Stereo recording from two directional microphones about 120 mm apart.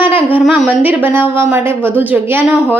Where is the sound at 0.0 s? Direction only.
15° right (ahead or behind).